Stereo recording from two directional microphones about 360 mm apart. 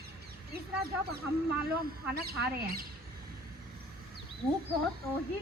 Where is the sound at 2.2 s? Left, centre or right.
Right.